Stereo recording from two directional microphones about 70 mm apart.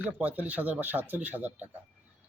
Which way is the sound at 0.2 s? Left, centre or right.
Right.